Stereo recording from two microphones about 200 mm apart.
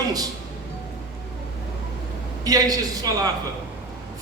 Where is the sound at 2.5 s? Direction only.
20° right (ahead or behind).